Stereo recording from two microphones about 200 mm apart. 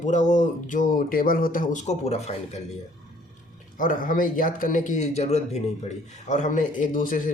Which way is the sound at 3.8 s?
40° left (ahead or behind).